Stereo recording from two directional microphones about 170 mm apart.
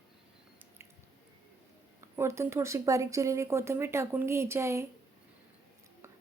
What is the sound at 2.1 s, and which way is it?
Speech, 15° right (ahead or behind).